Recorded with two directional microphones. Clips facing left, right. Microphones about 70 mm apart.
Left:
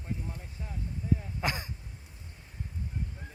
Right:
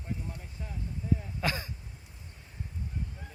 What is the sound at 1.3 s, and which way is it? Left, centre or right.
Throat clearing, left.